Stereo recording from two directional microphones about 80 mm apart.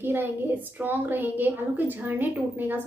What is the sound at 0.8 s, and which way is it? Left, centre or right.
A woman's voice, right.